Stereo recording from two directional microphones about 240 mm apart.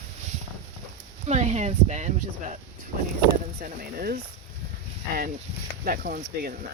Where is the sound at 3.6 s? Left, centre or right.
Right.